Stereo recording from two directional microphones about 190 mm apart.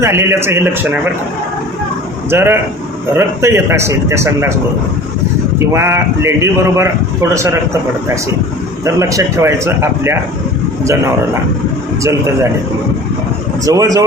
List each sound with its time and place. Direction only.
0.0 s a man's voice: 15° right (ahead or behind)
2.3 s a man's voice: 10° right (ahead or behind)
5.5 s a man's voice: 15° right (ahead or behind)
13.7 s a man's voice: 20° right (ahead or behind)